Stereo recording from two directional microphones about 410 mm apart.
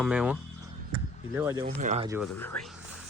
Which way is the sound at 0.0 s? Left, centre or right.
Centre.